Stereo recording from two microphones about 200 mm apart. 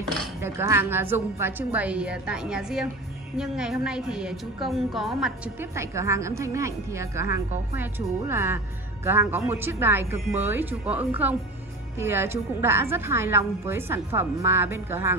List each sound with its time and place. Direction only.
0.4 s a woman's voice: 10° right (ahead or behind)